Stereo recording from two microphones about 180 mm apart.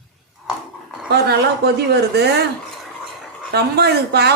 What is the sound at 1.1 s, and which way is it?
Speech, 65° right (ahead or behind).